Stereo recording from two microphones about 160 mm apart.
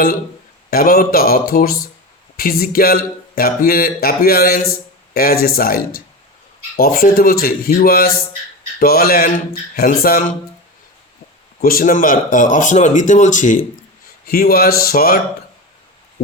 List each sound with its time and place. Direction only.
0.7 s speech: 65° left (ahead or behind)
11.6 s speech: 65° left (ahead or behind)
14.3 s speech: 70° left (ahead or behind)